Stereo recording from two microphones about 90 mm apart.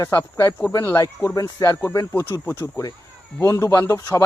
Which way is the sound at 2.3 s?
25° left (ahead or behind).